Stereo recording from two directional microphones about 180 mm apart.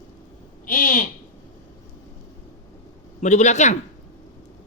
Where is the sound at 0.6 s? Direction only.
50° left (ahead or behind).